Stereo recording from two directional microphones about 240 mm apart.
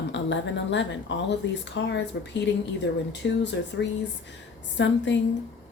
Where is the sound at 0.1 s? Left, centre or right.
Left.